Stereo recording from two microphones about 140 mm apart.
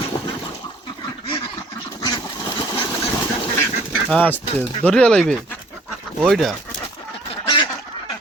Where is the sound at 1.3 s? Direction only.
25° left (ahead or behind).